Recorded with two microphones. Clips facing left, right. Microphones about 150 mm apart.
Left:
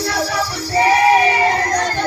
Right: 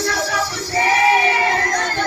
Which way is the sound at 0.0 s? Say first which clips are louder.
Left 1 dB; 35° left (ahead or behind).